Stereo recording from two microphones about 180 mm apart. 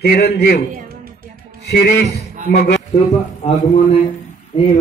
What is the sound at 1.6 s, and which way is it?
A man's voice, 65° left (ahead or behind).